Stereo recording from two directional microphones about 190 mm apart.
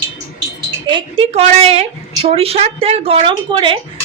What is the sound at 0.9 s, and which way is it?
A woman's voice, 25° right (ahead or behind).